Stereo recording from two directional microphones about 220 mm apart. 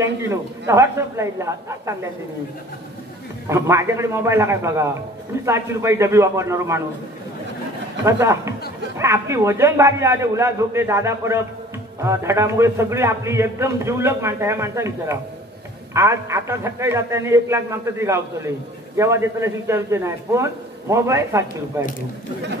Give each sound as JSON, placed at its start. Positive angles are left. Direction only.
{"t": 0.0, "sound": "a man's voice", "side_deg": -15}
{"t": 3.4, "sound": "a man's voice", "side_deg": -10}
{"t": 8.0, "sound": "a man's voice", "side_deg": -15}